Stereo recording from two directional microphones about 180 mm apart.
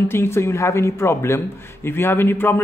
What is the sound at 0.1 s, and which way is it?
A man's voice, 15° left (ahead or behind).